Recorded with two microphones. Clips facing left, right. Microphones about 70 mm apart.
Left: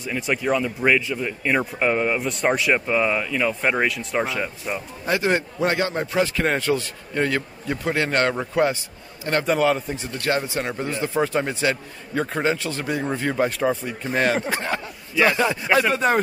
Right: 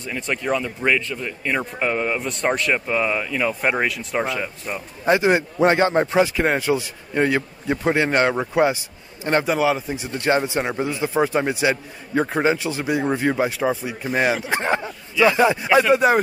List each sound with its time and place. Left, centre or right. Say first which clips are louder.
0.0 s speech: left 1 dB; centre
5.0 s speech: right 5 dB; right
6.2 s speech: right 2 dB; centre
10.0 s speech: right 4 dB; right
14.5 s speech: right 4 dB; right
15.9 s speech: right 4 dB; centre